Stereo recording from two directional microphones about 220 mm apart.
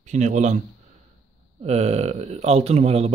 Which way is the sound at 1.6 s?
30° right (ahead or behind).